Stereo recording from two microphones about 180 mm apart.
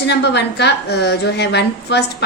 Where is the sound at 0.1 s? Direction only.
70° left (ahead or behind).